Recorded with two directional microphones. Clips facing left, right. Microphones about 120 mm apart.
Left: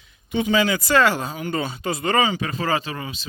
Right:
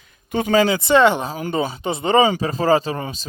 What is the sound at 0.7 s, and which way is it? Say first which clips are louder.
Speech: right 4 dB; 25° right (ahead or behind).